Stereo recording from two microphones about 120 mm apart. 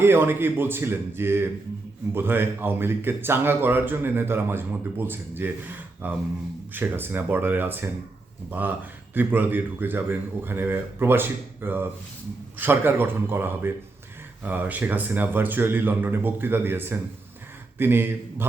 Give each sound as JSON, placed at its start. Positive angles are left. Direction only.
{"t": 0.0, "sound": "speech", "side_deg": -20}